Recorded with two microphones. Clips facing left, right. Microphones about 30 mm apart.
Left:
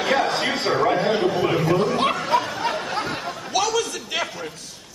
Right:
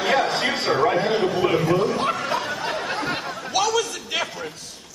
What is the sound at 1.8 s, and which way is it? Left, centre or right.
Snicker, left.